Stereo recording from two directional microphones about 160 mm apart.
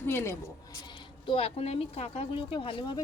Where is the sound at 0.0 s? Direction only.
15° left (ahead or behind).